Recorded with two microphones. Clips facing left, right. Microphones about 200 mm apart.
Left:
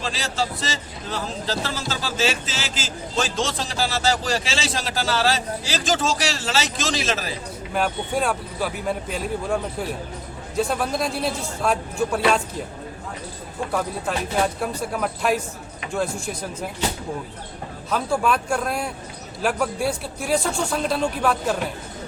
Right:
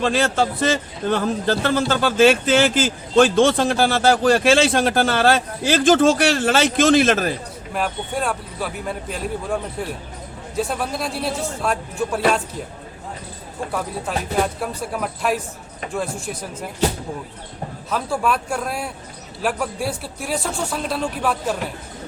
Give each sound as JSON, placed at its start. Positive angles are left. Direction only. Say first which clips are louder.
{"t": 0.0, "sound": "a man's voice", "louder": "right 8 dB", "side_deg": -55}
{"t": 7.7, "sound": "speech", "louder": "left 1 dB", "side_deg": 0}
{"t": 14.1, "sound": "speech", "louder": "right 2 dB", "side_deg": 0}
{"t": 17.9, "sound": "speech", "louder": "even", "side_deg": 0}